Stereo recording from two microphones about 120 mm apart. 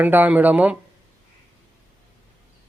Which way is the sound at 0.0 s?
15° right (ahead or behind).